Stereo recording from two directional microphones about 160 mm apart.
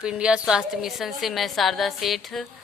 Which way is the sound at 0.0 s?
5° right (ahead or behind).